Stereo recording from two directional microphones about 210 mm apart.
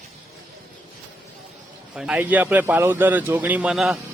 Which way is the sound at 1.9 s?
5° right (ahead or behind).